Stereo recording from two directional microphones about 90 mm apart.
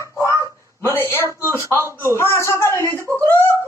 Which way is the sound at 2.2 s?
30° left (ahead or behind).